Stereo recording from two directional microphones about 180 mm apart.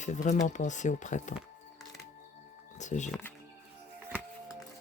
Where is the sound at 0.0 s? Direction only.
40° left (ahead or behind).